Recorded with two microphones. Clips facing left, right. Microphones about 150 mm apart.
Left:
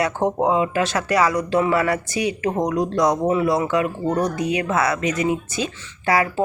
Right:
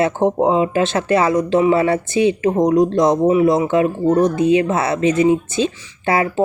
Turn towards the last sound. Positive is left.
turn(degrees=-25)  # may be behind; listen again after turning